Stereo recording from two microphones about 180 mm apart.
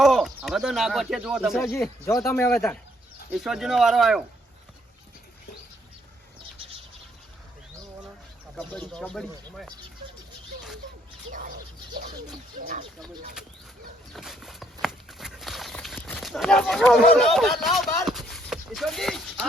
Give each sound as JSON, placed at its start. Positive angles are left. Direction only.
{"t": 0.0, "sound": "speech", "side_deg": 0}
{"t": 2.2, "sound": "speech", "side_deg": 10}
{"t": 3.3, "sound": "speech", "side_deg": 0}
{"t": 8.5, "sound": "speech", "side_deg": 5}
{"t": 11.3, "sound": "a sound", "side_deg": -50}
{"t": 12.2, "sound": "bird", "side_deg": -50}
{"t": 14.1, "sound": "a sound", "side_deg": 0}
{"t": 18.0, "sound": "clip-clop", "side_deg": 0}